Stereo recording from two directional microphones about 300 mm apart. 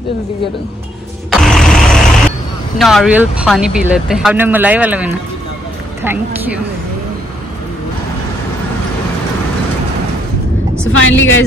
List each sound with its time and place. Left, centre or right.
1.3 s a sound: centre
2.8 s speech: centre
10.9 s speech: left